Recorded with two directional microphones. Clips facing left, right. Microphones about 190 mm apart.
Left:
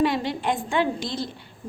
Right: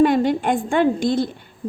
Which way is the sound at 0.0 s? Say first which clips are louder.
Right 7 dB; 50° right (ahead or behind).